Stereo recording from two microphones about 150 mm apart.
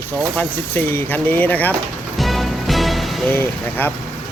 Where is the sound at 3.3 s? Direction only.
15° left (ahead or behind).